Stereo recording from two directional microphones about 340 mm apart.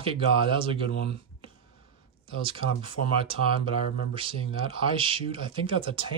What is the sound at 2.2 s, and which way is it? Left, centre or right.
Speech, centre.